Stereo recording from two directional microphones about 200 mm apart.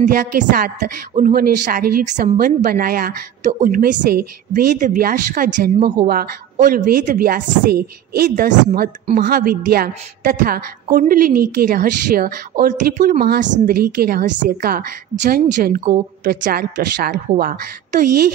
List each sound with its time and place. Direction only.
0.0 s a woman's voice: 40° right (ahead or behind)